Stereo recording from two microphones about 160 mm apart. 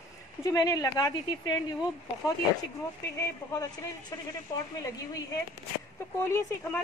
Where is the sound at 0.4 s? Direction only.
20° left (ahead or behind).